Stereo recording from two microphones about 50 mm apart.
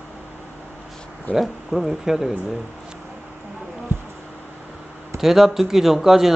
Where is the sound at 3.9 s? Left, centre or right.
Right.